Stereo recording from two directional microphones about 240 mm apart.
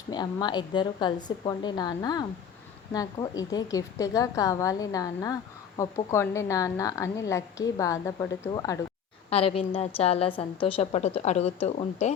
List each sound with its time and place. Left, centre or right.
0.1 s a woman's voice: centre
9.3 s a woman's voice: left